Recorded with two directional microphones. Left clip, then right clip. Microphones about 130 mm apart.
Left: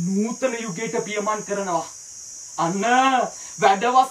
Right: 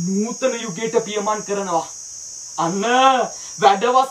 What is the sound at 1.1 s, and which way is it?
A man's voice, 25° right (ahead or behind).